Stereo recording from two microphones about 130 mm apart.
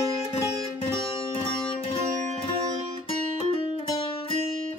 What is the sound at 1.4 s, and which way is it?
Music, 45° left (ahead or behind).